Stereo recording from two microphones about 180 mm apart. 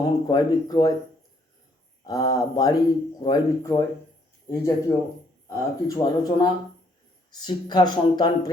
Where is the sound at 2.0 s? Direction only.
20° left (ahead or behind).